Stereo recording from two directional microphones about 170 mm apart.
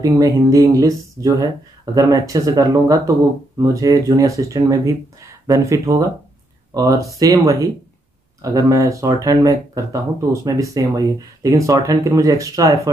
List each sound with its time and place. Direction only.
0.0 s speech: 20° right (ahead or behind)